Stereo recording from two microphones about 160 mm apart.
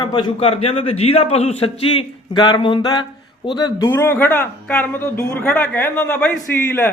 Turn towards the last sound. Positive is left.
turn(degrees=15)  # may be behind; listen again after turning